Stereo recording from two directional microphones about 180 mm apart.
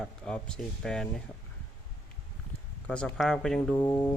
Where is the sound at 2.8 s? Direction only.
5° left (ahead or behind).